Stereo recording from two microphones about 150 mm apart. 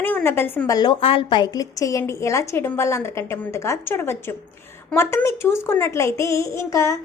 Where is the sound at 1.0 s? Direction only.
35° left (ahead or behind).